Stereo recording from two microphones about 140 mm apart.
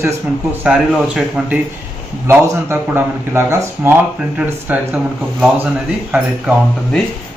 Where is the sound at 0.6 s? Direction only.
5° right (ahead or behind).